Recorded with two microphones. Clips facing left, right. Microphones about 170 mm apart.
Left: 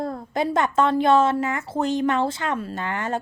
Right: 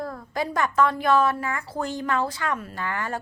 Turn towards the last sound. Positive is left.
turn(degrees=20)  # may be behind; listen again after turning